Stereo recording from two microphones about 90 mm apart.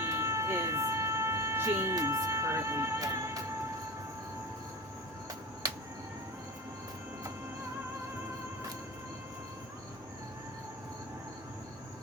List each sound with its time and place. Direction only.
0.0 s music: 30° right (ahead or behind)